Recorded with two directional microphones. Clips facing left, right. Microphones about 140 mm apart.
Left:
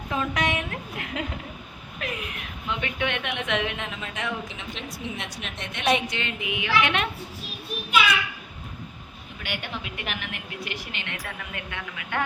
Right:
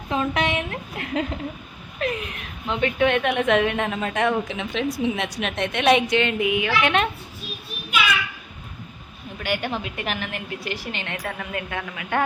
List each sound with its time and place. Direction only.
0.1 s a sound: 25° right (ahead or behind)
2.6 s a woman's voice: 35° right (ahead or behind)
9.4 s a woman's voice: 40° right (ahead or behind)